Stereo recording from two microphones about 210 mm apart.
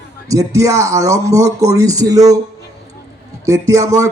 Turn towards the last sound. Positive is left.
turn(degrees=-15)  # may be behind; listen again after turning